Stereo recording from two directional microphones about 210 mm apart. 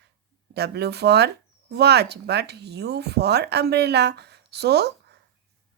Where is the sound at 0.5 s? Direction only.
50° right (ahead or behind).